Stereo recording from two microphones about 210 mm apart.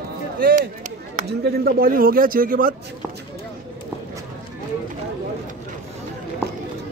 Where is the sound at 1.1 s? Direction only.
45° right (ahead or behind).